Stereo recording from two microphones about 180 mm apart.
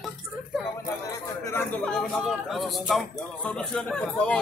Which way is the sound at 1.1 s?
15° left (ahead or behind).